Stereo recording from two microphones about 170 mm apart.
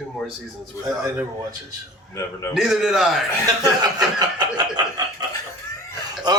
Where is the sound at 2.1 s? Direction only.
15° left (ahead or behind).